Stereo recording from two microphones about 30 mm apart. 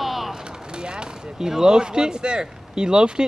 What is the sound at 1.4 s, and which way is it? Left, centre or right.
Speech, centre.